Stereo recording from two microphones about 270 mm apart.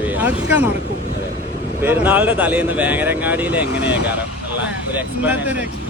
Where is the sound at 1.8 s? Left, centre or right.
Centre.